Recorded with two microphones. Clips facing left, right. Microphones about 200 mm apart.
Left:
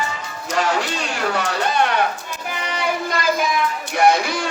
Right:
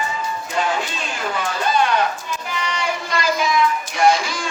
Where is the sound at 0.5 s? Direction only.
90° left; by 1.8 s 75° left (ahead or behind).